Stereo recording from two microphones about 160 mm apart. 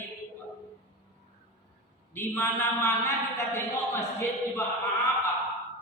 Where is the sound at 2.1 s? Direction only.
15° left (ahead or behind).